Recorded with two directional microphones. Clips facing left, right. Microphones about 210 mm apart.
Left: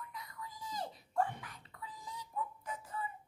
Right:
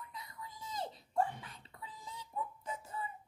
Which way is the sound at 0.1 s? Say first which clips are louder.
Left 1 dB; 25° right (ahead or behind).